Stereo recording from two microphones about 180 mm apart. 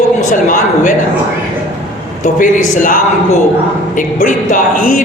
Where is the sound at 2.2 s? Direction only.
45° left (ahead or behind).